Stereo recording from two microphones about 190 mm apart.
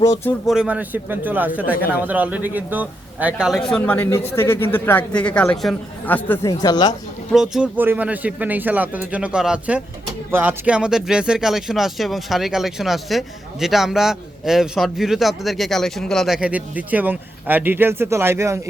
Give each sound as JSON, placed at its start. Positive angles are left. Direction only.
{"t": 0.0, "sound": "speech", "side_deg": 15}
{"t": 0.4, "sound": "speech", "side_deg": -5}
{"t": 6.5, "sound": "speech", "side_deg": 20}
{"t": 7.3, "sound": "speech", "side_deg": -5}